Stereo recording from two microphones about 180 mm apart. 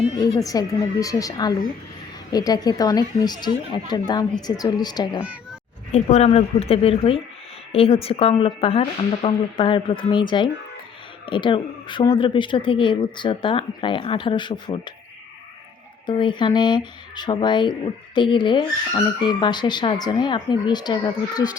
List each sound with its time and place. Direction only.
0.2 s speech: 20° left (ahead or behind)
5.2 s cat: 5° right (ahead or behind)
5.9 s a woman's voice: 35° left (ahead or behind)
16.0 s speech: 25° left (ahead or behind)